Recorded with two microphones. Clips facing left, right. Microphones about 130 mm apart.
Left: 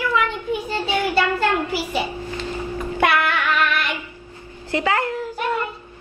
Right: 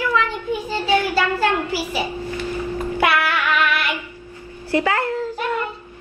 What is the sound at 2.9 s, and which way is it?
Female singing, 5° right (ahead or behind).